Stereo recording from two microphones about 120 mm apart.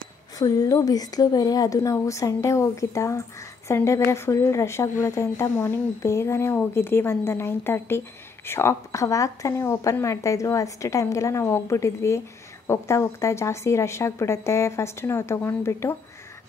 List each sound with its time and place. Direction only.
0.4 s a woman's voice: 30° left (ahead or behind)